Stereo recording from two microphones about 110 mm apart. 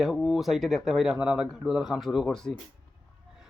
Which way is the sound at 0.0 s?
Centre (ahead or behind).